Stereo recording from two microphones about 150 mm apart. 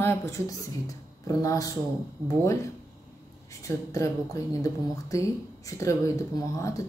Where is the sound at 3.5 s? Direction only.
20° left (ahead or behind).